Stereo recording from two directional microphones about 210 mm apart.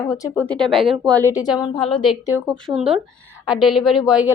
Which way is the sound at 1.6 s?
25° left (ahead or behind).